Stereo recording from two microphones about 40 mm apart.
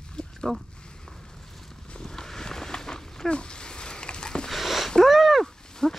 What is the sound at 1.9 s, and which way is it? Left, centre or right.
Walk, centre.